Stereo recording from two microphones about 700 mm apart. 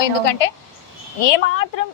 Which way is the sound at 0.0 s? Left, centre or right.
Left.